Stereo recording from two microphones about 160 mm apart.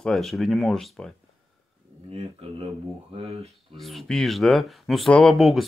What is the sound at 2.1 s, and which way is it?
Speech, 35° right (ahead or behind).